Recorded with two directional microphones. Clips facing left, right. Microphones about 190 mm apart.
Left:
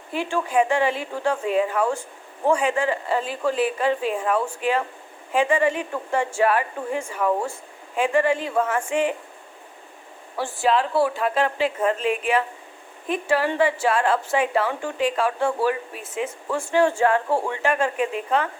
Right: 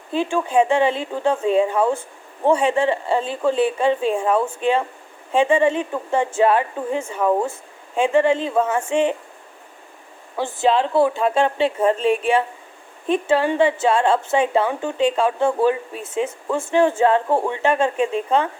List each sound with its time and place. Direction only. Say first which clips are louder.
0.1 s a woman's voice: right 4 dB; 20° right (ahead or behind)
10.3 s a woman's voice: right 3 dB; 20° right (ahead or behind)